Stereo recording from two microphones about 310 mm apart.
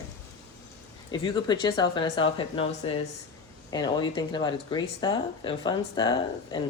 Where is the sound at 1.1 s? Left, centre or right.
Centre.